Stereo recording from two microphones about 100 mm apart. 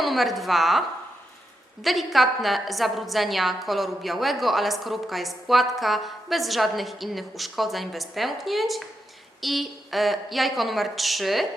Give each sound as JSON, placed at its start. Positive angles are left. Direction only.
{"t": 0.0, "sound": "a woman's voice", "side_deg": 0}